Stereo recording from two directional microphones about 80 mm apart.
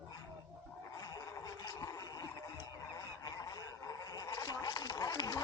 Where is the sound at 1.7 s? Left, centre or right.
Left.